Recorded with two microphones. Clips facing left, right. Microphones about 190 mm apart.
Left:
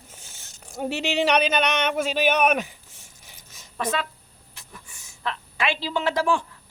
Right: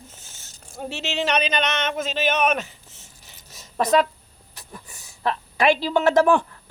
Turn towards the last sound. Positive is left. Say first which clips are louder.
# right 6 dB
turn(degrees=-55)  # may be behind; listen again after turning